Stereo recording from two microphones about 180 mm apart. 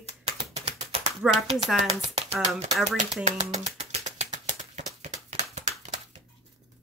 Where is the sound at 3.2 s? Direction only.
40° right (ahead or behind).